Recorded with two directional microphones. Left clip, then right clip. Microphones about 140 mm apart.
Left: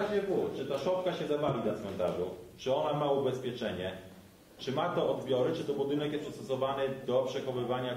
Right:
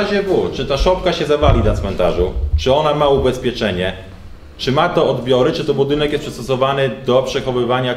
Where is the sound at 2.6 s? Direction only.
25° right (ahead or behind).